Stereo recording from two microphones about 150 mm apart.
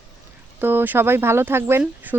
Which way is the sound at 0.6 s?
15° right (ahead or behind).